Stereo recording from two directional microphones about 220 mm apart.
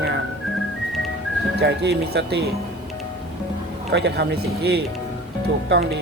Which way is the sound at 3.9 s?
50° right (ahead or behind).